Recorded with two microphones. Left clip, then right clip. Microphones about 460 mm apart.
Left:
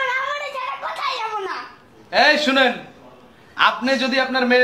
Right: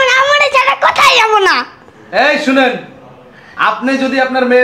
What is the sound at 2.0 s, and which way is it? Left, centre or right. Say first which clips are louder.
A man's voice: right 4 dB; left.